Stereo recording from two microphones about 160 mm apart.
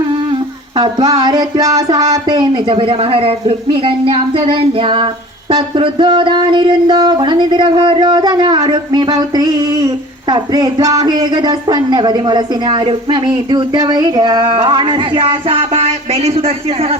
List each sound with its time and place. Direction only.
0.8 s speech: 25° right (ahead or behind)